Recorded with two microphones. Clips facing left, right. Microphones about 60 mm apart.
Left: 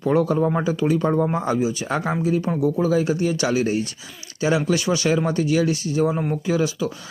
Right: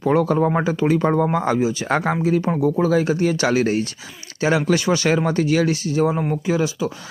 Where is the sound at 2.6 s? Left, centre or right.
Right.